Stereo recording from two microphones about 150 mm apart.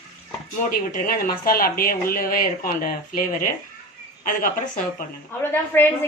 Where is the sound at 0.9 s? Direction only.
70° left (ahead or behind).